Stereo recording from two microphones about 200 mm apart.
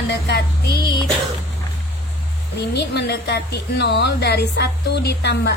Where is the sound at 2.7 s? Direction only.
60° left (ahead or behind).